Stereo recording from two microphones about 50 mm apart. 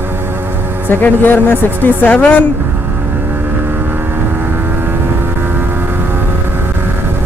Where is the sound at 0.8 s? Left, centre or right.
Left.